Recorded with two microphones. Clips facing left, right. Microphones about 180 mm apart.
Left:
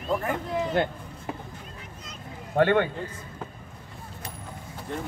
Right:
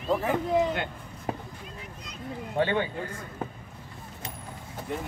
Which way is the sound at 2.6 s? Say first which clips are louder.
Left 5 dB; 60° left (ahead or behind).